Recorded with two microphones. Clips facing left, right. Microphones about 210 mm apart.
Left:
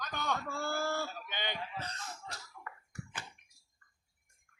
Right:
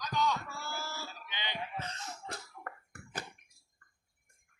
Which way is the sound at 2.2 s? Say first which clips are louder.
Right 4 dB; 55° right (ahead or behind).